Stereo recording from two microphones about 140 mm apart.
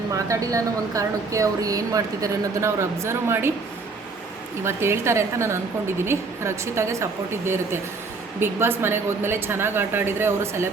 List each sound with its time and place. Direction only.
0.1 s a woman's voice: 25° right (ahead or behind)
4.6 s a woman's voice: 20° right (ahead or behind)